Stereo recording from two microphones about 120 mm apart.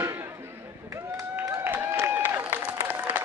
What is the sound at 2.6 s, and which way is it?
Applause, 10° right (ahead or behind).